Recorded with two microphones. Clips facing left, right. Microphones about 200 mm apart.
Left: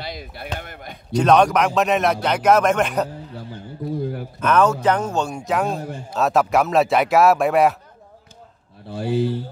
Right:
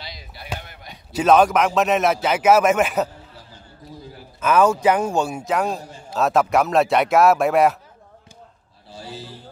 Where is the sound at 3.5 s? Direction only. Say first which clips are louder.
Left 18 dB; 60° left (ahead or behind).